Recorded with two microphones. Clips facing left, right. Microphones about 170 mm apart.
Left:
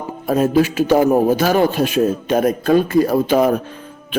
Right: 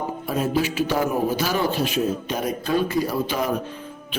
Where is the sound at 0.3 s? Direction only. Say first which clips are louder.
Left 9 dB; 50° left (ahead or behind).